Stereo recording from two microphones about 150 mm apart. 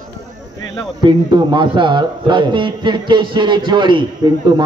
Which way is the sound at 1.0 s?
30° right (ahead or behind).